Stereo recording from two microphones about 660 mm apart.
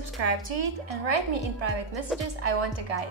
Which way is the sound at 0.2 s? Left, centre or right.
Right.